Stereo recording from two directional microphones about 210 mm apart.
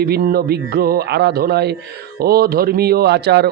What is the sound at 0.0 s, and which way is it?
A man's voice, 50° right (ahead or behind).